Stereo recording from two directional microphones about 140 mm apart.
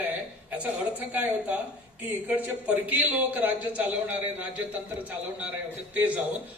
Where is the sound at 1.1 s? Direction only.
10° right (ahead or behind).